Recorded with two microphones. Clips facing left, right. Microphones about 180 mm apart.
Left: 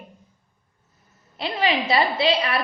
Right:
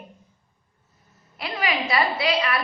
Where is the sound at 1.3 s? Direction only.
25° left (ahead or behind).